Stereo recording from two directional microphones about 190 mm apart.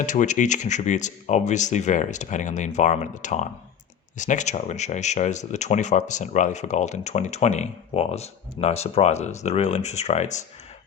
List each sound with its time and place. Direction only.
0.0 s speech: 40° left (ahead or behind)